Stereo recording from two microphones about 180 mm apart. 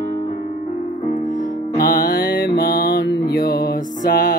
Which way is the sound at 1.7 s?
55° left (ahead or behind).